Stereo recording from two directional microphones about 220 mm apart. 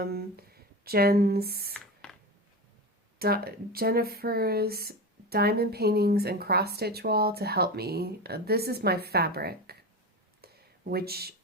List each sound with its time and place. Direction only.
0.0 s speech: 45° right (ahead or behind)
3.2 s speech: 45° right (ahead or behind)
10.4 s a sound: 45° right (ahead or behind)